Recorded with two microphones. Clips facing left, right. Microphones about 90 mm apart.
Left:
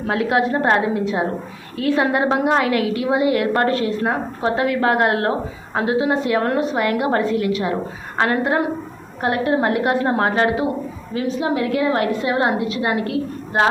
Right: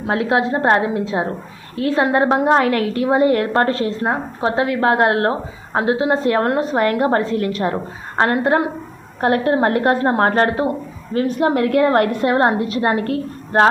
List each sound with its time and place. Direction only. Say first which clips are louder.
0.1 s a woman's voice: right 1 dB; 30° right (ahead or behind); by 13.7 s 45° right (ahead or behind)